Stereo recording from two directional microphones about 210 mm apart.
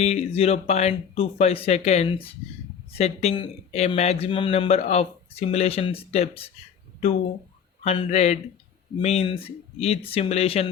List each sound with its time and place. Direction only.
0.0 s speech: 30° left (ahead or behind)
7.9 s speech: 30° left (ahead or behind)